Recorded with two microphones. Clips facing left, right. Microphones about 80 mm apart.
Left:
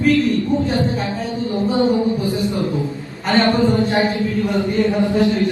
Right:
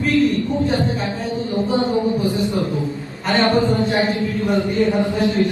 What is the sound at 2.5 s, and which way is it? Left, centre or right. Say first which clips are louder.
Speech: left 1 dB; left.